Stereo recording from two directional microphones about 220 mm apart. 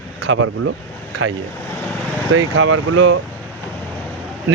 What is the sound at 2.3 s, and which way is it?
Speech, 70° right (ahead or behind).